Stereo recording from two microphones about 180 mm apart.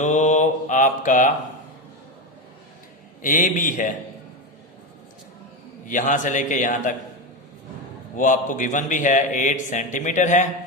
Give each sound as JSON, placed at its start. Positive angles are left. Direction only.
{"t": 0.0, "sound": "mantra", "side_deg": 40}
{"t": 3.2, "sound": "a man's voice", "side_deg": 45}
{"t": 5.9, "sound": "a man's voice", "side_deg": 45}
{"t": 8.1, "sound": "a man's voice", "side_deg": 45}